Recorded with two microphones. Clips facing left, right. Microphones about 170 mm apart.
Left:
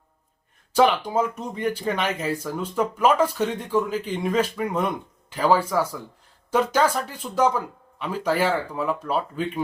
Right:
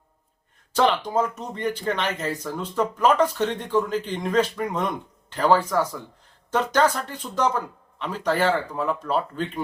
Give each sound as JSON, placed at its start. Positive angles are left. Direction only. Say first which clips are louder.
{"t": 0.7, "sound": "speech", "louder": "left 2 dB", "side_deg": 10}